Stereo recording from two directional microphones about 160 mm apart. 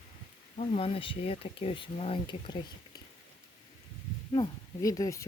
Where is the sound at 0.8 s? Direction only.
35° left (ahead or behind).